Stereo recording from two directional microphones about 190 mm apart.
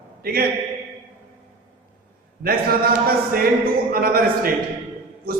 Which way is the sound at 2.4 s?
50° right (ahead or behind).